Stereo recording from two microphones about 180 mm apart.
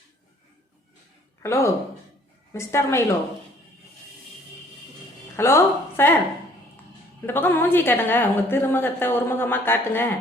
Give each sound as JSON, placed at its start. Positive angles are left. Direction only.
{"t": 1.4, "sound": "a woman's voice", "side_deg": 15}
{"t": 5.4, "sound": "a woman's voice", "side_deg": 15}
{"t": 7.3, "sound": "a woman's voice", "side_deg": 10}